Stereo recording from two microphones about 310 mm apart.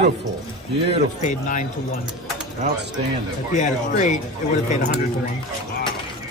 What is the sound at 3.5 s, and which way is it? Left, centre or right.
Speech, left.